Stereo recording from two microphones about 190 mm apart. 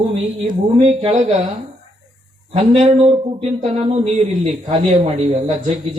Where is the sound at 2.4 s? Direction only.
30° right (ahead or behind).